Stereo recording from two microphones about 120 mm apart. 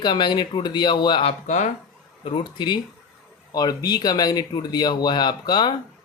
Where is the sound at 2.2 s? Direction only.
45° left (ahead or behind).